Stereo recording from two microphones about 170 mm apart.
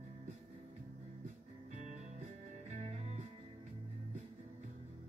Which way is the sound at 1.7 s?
45° right (ahead or behind).